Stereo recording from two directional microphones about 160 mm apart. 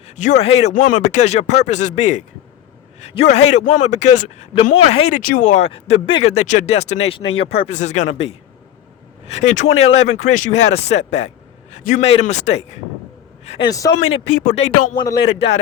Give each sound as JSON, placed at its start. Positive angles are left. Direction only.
{"t": 0.2, "sound": "speech", "side_deg": 45}
{"t": 5.6, "sound": "speech", "side_deg": 35}
{"t": 13.7, "sound": "speech", "side_deg": 20}
{"t": 13.9, "sound": "speech", "side_deg": 40}
{"t": 14.9, "sound": "speech", "side_deg": 25}